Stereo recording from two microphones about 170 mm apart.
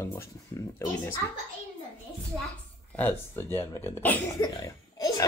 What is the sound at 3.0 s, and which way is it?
Speech, 10° left (ahead or behind).